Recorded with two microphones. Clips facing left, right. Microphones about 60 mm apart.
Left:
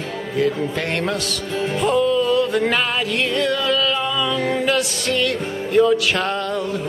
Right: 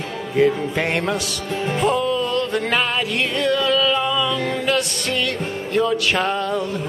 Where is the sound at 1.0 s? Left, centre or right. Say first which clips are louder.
Even; centre.